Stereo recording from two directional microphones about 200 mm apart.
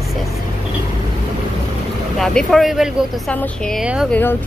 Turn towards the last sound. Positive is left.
turn(degrees=-5)  # may be behind; listen again after turning